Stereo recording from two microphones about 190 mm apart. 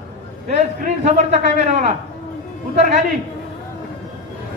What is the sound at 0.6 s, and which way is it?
A man's voice, 35° right (ahead or behind).